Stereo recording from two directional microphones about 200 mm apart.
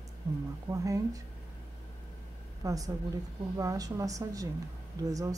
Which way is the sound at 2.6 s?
15° right (ahead or behind).